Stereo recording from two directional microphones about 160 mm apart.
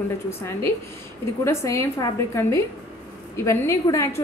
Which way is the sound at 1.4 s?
15° left (ahead or behind).